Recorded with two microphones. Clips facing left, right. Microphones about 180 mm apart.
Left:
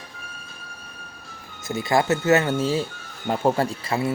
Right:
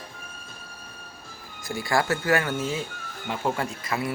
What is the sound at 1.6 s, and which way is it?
Speech, 20° left (ahead or behind).